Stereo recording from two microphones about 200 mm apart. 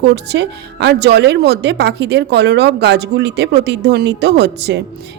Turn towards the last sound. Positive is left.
turn(degrees=-55)  # may be behind; listen again after turning